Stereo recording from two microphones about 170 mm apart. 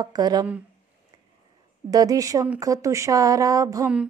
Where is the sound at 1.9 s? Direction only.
20° right (ahead or behind).